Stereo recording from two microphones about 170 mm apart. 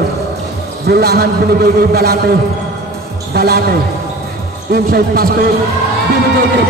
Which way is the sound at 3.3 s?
70° right (ahead or behind).